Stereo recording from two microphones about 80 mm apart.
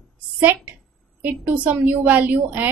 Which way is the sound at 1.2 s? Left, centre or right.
Right.